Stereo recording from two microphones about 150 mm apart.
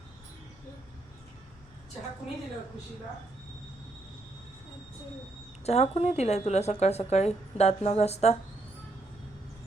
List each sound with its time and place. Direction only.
5.6 s speech: 45° left (ahead or behind)